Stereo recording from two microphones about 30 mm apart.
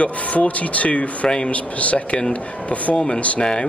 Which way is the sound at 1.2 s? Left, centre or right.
Left.